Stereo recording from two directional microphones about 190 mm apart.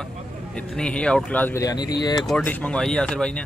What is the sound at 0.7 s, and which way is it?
Speech, 5° left (ahead or behind).